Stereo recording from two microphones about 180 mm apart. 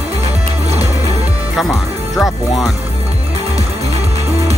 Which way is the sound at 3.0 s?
35° right (ahead or behind).